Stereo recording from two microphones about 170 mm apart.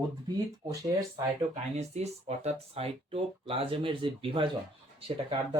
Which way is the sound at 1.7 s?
40° right (ahead or behind).